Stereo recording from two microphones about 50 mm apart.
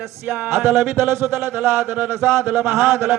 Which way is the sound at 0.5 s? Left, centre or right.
Right.